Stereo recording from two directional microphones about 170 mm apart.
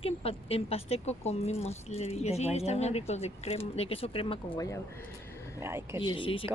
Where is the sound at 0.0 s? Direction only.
35° left (ahead or behind).